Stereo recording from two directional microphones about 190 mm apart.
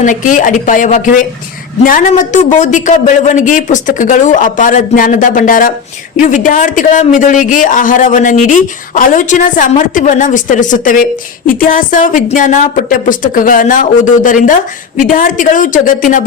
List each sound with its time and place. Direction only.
0.0 s a man's voice: 40° left (ahead or behind)